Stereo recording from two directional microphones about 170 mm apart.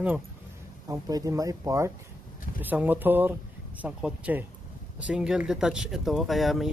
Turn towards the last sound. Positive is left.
turn(degrees=0)  # may be behind; listen again after turning